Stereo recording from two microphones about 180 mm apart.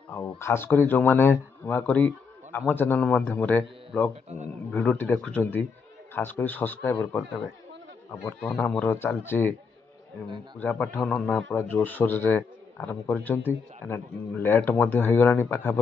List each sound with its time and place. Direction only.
0.4 s speech: 15° left (ahead or behind)
4.1 s a man's voice: 40° right (ahead or behind)
4.7 s speech: 10° left (ahead or behind)
10.6 s a man's voice: 10° left (ahead or behind)